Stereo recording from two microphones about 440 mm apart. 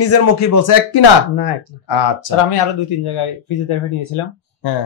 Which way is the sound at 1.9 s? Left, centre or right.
Left.